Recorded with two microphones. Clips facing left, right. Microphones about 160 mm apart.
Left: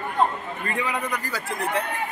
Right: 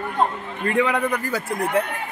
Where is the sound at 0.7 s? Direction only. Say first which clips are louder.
Right 8 dB; 65° right (ahead or behind).